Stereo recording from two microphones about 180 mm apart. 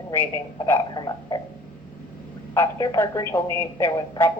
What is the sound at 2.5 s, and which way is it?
Speech, 20° left (ahead or behind).